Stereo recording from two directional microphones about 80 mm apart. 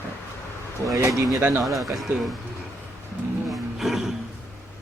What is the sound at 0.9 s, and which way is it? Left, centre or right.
Speech, right.